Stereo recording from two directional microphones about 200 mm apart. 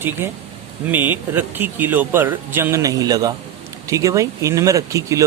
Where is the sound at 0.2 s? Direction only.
10° right (ahead or behind).